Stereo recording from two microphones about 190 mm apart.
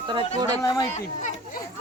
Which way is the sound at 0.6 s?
20° left (ahead or behind).